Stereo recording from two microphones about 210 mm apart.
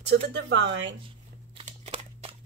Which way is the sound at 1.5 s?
30° right (ahead or behind).